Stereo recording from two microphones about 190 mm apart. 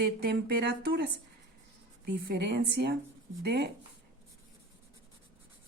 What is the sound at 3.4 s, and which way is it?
Speech, 60° right (ahead or behind).